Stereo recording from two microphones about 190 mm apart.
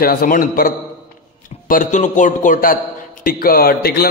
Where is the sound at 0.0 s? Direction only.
50° left (ahead or behind).